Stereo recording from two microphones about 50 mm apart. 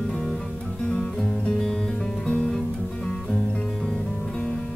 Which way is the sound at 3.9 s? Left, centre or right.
Centre.